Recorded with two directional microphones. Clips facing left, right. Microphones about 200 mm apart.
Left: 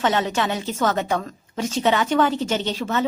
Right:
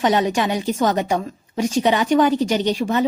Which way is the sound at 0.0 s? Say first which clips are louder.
Right 3 dB; 15° right (ahead or behind).